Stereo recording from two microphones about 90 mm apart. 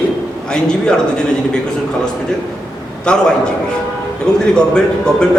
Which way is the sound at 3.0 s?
10° left (ahead or behind).